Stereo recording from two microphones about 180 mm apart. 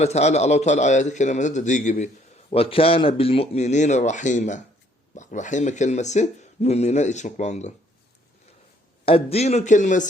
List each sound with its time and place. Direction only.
0.0 s speech: 40° left (ahead or behind)
2.5 s speech: 30° left (ahead or behind)
9.0 s speech: 35° left (ahead or behind)